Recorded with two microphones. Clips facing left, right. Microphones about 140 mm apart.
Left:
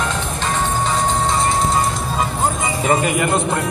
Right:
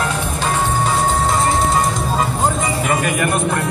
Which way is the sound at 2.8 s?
25° left (ahead or behind).